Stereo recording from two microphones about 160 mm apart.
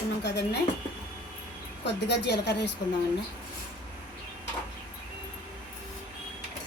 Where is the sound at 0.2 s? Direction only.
90° left.